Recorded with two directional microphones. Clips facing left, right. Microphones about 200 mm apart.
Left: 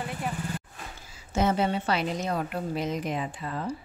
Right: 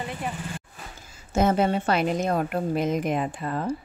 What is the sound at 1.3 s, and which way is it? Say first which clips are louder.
A woman's voice: right 4 dB; 50° right (ahead or behind).